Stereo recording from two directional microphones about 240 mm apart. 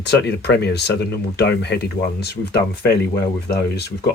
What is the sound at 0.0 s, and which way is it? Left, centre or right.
Speech, left.